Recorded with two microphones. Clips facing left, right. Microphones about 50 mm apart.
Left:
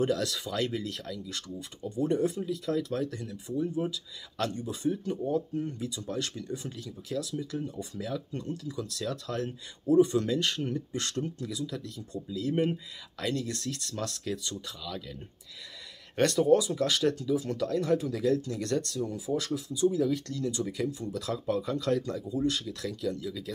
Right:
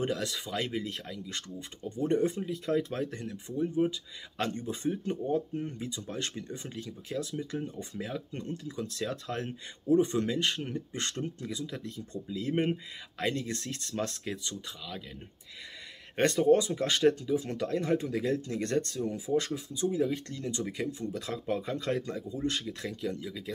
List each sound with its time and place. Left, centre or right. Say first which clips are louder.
0.0 s speech: left 4 dB; right
2.0 s speech: right 1 dB; right
16.2 s speech: left 1 dB; right